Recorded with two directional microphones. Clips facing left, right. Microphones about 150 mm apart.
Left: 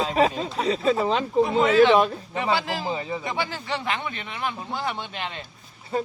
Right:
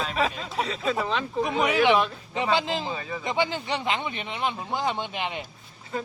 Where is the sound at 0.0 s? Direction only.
30° left (ahead or behind).